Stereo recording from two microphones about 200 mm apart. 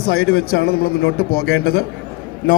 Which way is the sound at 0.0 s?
90° left.